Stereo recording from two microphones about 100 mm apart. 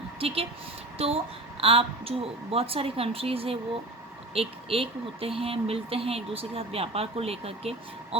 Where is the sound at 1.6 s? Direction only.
70° right (ahead or behind).